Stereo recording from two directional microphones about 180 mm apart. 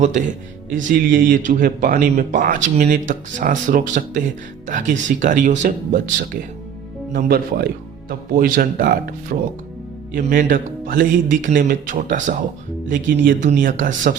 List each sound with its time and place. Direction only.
0.9 s a man's voice: 50° right (ahead or behind)
7.1 s a man's voice: 55° right (ahead or behind)